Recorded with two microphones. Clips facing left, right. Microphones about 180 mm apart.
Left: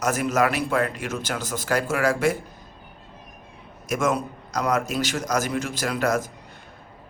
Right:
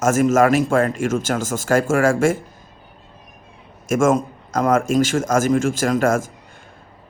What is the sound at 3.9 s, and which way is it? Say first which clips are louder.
Speech: right 7 dB; 45° right (ahead or behind).